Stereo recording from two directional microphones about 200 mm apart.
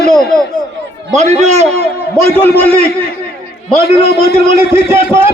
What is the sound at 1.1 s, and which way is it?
Speech, 35° right (ahead or behind).